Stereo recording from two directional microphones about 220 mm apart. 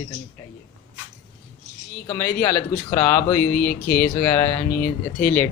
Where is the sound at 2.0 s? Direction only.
10° left (ahead or behind).